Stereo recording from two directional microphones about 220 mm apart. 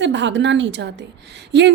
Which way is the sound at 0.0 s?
55° right (ahead or behind).